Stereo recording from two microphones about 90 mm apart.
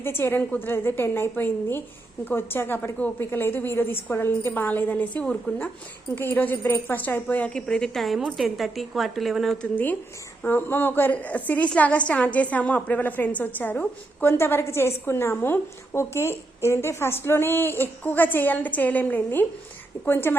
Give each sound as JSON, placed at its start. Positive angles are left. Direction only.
{"t": 0.0, "sound": "a woman's voice", "side_deg": 25}
{"t": 5.2, "sound": "speech", "side_deg": 10}
{"t": 6.1, "sound": "a woman's voice", "side_deg": 20}
{"t": 9.7, "sound": "a woman's voice", "side_deg": 20}